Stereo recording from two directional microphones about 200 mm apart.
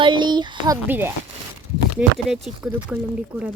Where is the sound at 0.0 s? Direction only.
25° right (ahead or behind).